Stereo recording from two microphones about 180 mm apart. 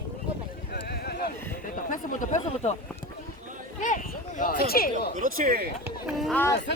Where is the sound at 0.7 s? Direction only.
65° left (ahead or behind).